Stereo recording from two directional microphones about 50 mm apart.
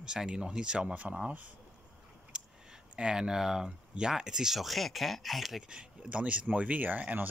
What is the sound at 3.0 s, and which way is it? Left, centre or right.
Speech, centre.